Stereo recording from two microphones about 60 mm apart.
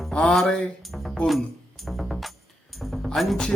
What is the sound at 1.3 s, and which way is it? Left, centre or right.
Music, centre.